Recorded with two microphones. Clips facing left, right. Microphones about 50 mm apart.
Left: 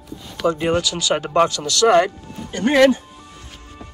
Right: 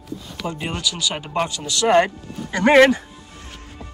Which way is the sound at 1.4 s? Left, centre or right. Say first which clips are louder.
Left 2 dB; centre.